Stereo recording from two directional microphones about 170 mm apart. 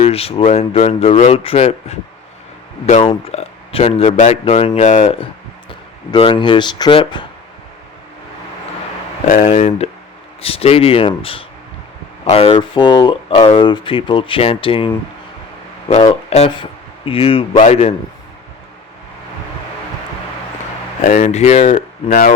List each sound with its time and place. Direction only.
0.0 s speech: 35° left (ahead or behind)
6.1 s speech: 30° left (ahead or behind)
9.2 s speech: 50° left (ahead or behind); by 14.9 s 30° left (ahead or behind)
16.3 s speech: 35° left (ahead or behind)
21.0 s speech: 45° left (ahead or behind)
22.1 s speech: 60° left (ahead or behind)